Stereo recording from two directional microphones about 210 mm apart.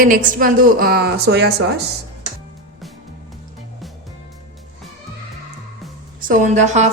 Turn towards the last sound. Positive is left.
turn(degrees=-35)  # may be behind; listen again after turning